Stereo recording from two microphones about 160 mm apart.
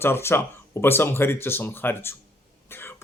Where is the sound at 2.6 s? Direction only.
15° left (ahead or behind).